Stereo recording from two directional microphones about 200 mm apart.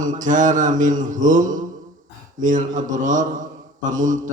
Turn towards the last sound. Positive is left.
turn(degrees=-40)  # may be behind; listen again after turning